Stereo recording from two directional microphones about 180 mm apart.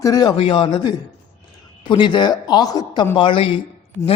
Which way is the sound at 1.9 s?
25° left (ahead or behind).